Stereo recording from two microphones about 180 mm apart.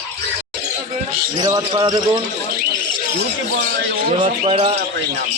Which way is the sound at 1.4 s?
25° right (ahead or behind).